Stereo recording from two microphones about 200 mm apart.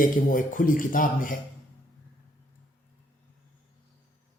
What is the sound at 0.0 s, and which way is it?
Speech, 45° left (ahead or behind).